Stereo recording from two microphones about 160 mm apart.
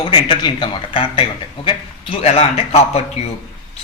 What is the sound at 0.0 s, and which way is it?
Speech, 30° left (ahead or behind).